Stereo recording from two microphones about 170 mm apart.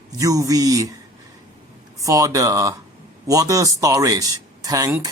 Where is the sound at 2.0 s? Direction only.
20° right (ahead or behind).